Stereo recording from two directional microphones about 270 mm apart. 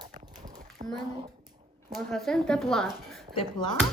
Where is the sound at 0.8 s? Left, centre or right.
Right.